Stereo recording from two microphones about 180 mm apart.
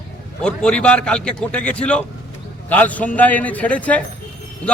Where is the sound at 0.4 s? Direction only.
5° left (ahead or behind).